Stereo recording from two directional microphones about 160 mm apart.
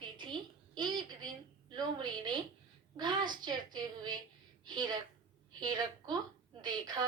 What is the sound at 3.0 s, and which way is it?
A woman's voice, 30° right (ahead or behind).